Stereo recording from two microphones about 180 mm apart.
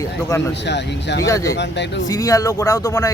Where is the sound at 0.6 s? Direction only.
75° left (ahead or behind).